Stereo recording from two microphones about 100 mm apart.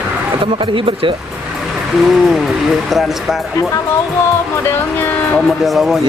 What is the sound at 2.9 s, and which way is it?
Speech, centre (ahead or behind).